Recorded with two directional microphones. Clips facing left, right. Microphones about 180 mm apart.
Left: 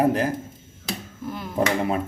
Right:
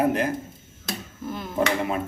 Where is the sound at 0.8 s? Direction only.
10° left (ahead or behind).